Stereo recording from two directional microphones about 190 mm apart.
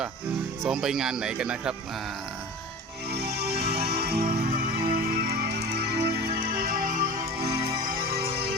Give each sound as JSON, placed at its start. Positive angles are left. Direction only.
{"t": 0.6, "sound": "speech", "side_deg": 0}
{"t": 3.1, "sound": "music", "side_deg": -60}